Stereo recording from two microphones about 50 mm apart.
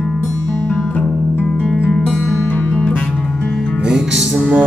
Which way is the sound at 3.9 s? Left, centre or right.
Centre.